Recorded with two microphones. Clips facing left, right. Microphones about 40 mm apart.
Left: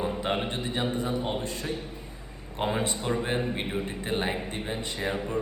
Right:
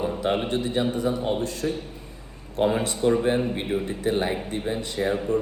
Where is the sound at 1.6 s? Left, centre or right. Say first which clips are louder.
Right 9 dB; centre.